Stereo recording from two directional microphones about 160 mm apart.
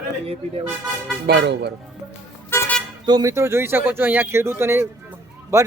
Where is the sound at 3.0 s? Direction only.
20° right (ahead or behind).